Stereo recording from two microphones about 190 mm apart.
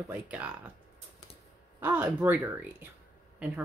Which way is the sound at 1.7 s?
10° right (ahead or behind).